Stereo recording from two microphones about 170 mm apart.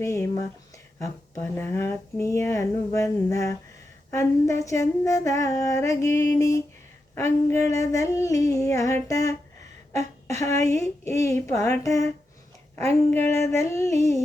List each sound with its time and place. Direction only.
0.0 s speech: 15° left (ahead or behind)
9.9 s a sound: 40° right (ahead or behind)
10.4 s speech: 15° left (ahead or behind)
13.9 s humming: 40° right (ahead or behind)